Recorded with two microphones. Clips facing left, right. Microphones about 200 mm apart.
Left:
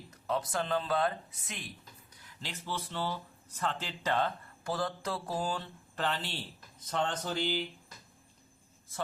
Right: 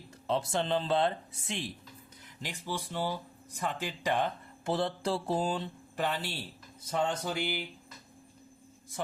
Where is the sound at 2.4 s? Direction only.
15° right (ahead or behind).